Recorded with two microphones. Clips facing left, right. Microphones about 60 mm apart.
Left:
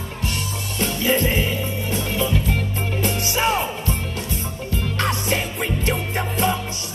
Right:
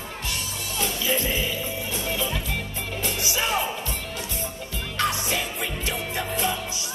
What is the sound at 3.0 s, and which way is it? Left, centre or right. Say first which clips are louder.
Music: left 5 dB; left.